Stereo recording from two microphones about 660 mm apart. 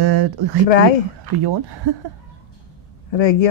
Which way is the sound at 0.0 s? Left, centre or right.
Right.